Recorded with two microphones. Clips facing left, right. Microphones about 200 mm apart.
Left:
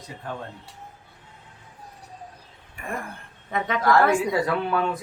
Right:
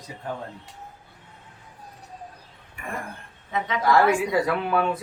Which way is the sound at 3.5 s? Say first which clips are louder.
Left 1 dB; 55° left (ahead or behind).